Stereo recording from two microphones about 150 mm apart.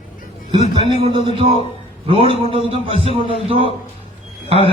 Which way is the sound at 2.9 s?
40° left (ahead or behind).